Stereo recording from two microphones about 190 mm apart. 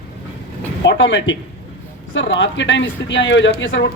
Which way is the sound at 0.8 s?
75° left (ahead or behind).